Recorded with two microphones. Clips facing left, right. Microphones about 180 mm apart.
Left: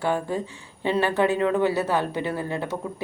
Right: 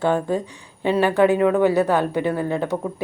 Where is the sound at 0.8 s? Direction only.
15° right (ahead or behind).